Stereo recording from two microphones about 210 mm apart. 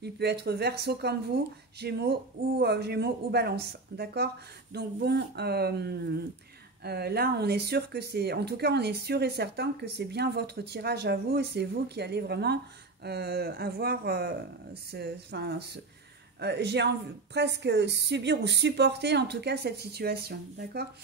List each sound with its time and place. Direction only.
0.0 s speech: 50° right (ahead or behind)